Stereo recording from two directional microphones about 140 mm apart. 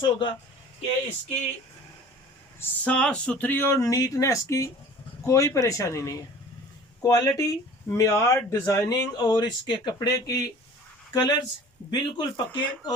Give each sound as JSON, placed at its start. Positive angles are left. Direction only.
{"t": 0.0, "sound": "speech", "side_deg": 35}
{"t": 2.6, "sound": "speech", "side_deg": 10}